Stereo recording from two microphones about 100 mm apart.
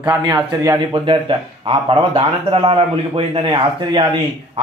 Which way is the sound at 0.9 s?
60° right (ahead or behind).